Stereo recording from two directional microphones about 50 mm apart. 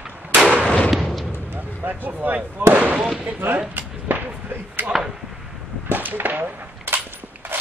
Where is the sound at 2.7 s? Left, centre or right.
Right.